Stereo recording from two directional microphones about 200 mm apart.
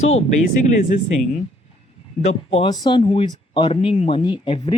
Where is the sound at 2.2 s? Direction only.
30° left (ahead or behind).